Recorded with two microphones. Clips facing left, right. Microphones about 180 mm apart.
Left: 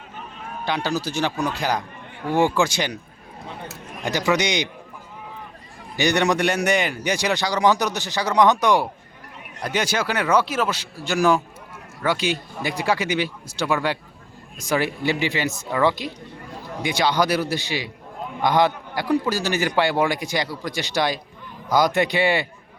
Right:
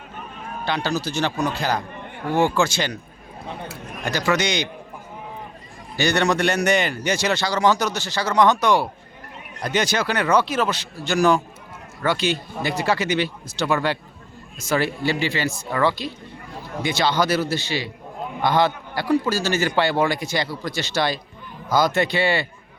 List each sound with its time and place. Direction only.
0.6 s a man's voice: 10° left (ahead or behind)
4.0 s a man's voice: 15° left (ahead or behind)
6.0 s a man's voice: 15° left (ahead or behind)